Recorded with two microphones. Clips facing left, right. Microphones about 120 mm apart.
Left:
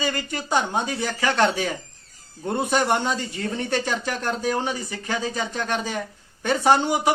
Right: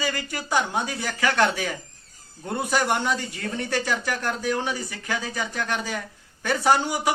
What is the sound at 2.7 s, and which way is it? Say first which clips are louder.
Speech: left 1 dB; 20° left (ahead or behind).